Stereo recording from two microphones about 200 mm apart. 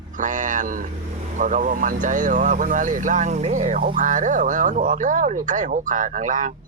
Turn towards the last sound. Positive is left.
turn(degrees=-40)  # may be behind; listen again after turning